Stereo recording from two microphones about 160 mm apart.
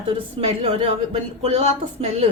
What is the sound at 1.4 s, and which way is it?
Speech, 40° right (ahead or behind).